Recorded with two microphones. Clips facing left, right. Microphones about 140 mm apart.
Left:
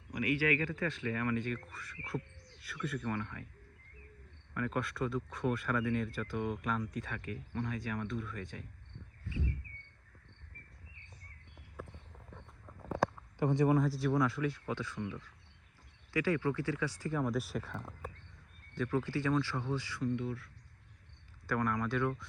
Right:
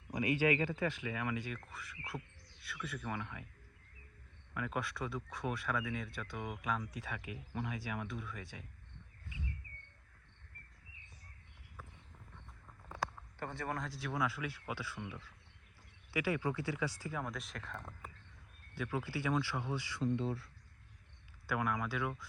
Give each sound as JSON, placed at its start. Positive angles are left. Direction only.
{"t": 0.1, "sound": "speech", "side_deg": -25}
{"t": 4.5, "sound": "speech", "side_deg": -5}
{"t": 13.4, "sound": "speech", "side_deg": 15}
{"t": 18.7, "sound": "speech", "side_deg": -10}
{"t": 20.1, "sound": "speech", "side_deg": -30}
{"t": 21.4, "sound": "speech", "side_deg": -5}